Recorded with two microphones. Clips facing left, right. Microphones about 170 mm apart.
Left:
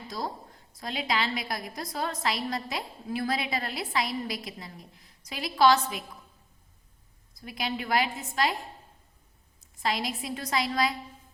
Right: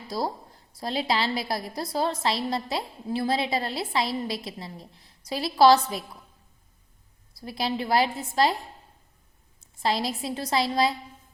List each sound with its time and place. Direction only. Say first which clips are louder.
0.1 s a woman's voice: right 6 dB; 35° right (ahead or behind)
7.3 s a woman's voice: right 4 dB; 30° right (ahead or behind)
9.8 s a woman's voice: right 4 dB; 30° right (ahead or behind)